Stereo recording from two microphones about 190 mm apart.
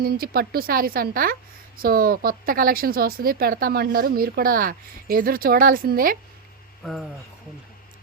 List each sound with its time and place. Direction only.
0.0 s speech: 50° right (ahead or behind)